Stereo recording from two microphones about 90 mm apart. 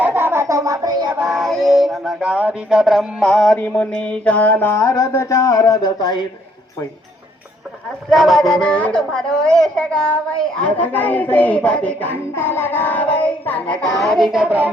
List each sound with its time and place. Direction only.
0.0 s a sound: 25° right (ahead or behind); by 1.1 s 50° right (ahead or behind)
1.3 s male singing: centre (ahead or behind)
2.2 s music: 15° right (ahead or behind)
3.2 s speech: 5° left (ahead or behind)
3.9 s a woman's voice: 15° left (ahead or behind)
4.8 s a sound: 35° left (ahead or behind)
8.1 s a woman's voice: centre (ahead or behind); by 12.1 s 15° left (ahead or behind)
12.4 s child singing: 25° left (ahead or behind)
14.0 s music: centre (ahead or behind); by 14.7 s 15° right (ahead or behind)